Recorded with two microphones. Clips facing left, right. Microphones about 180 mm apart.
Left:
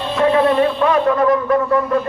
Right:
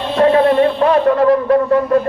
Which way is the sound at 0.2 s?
35° right (ahead or behind).